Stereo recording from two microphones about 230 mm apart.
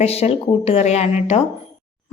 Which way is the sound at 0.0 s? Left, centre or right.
Left.